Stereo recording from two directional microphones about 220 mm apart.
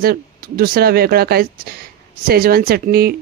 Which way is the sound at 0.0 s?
45° right (ahead or behind).